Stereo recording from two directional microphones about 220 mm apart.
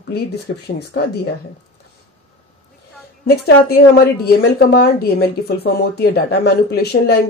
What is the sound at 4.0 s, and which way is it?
Speech, 45° left (ahead or behind).